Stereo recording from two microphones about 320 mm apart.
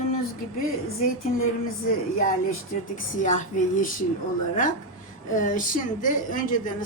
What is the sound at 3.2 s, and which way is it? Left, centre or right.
Speech, left.